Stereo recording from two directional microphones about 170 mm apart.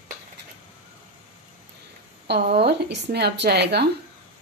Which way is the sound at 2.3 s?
75° right (ahead or behind).